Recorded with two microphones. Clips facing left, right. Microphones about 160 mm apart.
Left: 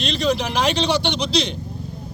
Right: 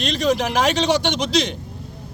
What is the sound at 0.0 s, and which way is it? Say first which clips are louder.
A man's voice: right 1 dB; 45° right (ahead or behind).